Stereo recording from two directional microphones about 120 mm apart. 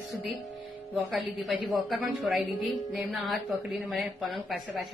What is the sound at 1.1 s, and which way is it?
A woman's voice, centre (ahead or behind).